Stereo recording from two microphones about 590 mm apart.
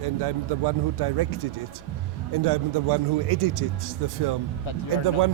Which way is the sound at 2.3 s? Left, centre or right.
Right.